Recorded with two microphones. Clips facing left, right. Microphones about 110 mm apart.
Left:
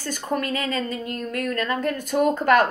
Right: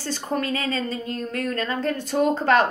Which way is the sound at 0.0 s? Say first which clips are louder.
Even; 30° right (ahead or behind).